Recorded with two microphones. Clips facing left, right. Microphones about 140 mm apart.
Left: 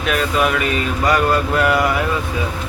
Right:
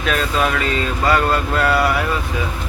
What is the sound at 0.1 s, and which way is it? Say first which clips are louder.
Speech: left 1 dB; 15° left (ahead or behind).